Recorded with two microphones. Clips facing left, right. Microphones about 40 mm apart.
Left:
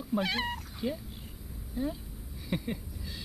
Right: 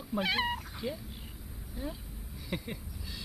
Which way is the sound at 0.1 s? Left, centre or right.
Centre.